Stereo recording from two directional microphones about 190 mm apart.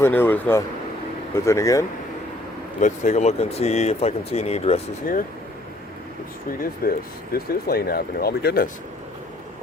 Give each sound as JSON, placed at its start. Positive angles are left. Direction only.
{"t": 0.0, "sound": "speech", "side_deg": 10}
{"t": 2.8, "sound": "speech", "side_deg": 40}
{"t": 6.5, "sound": "speech", "side_deg": 50}